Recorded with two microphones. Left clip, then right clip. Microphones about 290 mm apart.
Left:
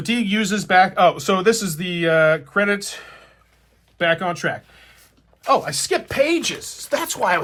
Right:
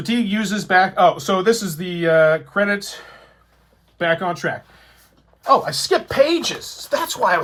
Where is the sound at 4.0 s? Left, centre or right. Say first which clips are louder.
Even; left.